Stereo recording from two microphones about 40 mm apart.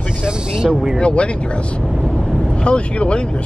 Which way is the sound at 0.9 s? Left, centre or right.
Left.